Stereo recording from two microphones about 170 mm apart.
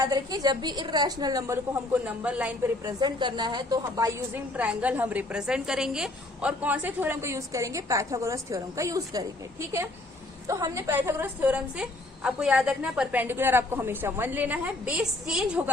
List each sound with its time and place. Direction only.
0.0 s a woman's voice: 20° right (ahead or behind)
2.8 s a woman's voice: 25° right (ahead or behind)
4.5 s a woman's voice: 10° right (ahead or behind)